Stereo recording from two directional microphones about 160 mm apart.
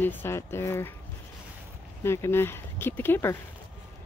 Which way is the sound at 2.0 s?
15° left (ahead or behind).